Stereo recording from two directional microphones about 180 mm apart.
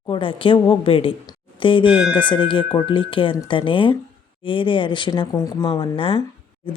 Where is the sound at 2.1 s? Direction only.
25° left (ahead or behind).